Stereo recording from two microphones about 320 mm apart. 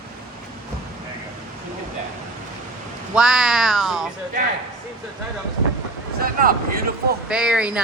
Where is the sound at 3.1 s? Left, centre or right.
Centre.